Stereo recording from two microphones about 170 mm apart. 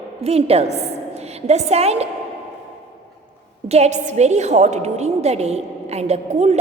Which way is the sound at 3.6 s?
40° right (ahead or behind).